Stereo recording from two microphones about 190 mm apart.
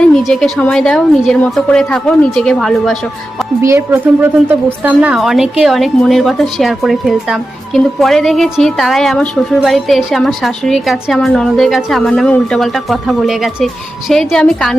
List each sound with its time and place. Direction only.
0.1 s a woman's voice: centre (ahead or behind)
3.6 s a woman's voice: 10° right (ahead or behind)